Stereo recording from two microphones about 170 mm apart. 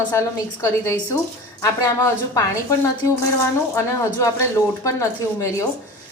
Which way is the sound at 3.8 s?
15° left (ahead or behind).